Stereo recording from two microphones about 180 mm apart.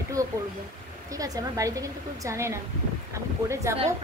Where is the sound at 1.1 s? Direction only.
20° right (ahead or behind).